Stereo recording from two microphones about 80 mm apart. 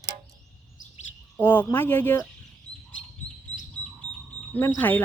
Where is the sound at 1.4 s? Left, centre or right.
Left.